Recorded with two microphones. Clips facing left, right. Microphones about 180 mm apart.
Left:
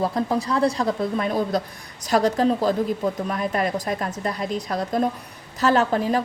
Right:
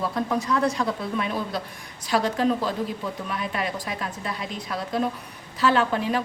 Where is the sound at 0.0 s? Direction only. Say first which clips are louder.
Left 3 dB; 35° left (ahead or behind).